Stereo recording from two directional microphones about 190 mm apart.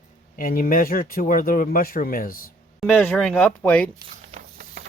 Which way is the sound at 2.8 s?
5° left (ahead or behind).